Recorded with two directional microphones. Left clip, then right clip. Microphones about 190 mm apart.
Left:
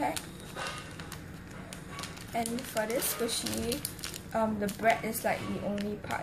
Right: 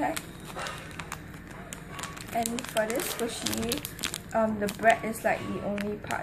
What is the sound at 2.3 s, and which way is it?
Speech, 5° left (ahead or behind).